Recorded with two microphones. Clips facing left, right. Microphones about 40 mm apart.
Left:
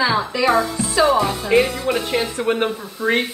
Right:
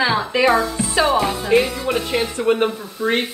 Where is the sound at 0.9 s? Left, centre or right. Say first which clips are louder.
Left 1 dB; right.